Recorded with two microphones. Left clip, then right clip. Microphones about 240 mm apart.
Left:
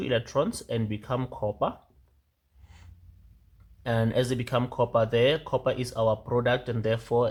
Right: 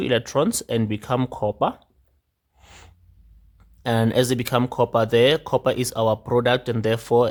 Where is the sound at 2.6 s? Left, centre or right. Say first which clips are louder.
Right 12 dB; right.